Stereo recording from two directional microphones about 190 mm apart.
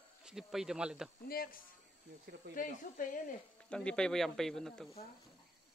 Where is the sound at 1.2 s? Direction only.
50° left (ahead or behind).